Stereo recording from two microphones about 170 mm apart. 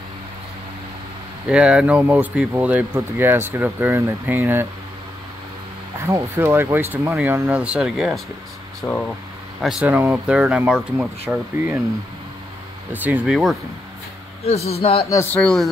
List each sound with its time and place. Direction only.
1.5 s speech: 5° right (ahead or behind)
5.9 s speech: 15° right (ahead or behind)
8.8 s speech: 10° left (ahead or behind)
9.6 s speech: centre (ahead or behind)
12.9 s speech: 10° right (ahead or behind)
14.4 s a man's voice: 35° left (ahead or behind)
15.3 s speech: 5° left (ahead or behind)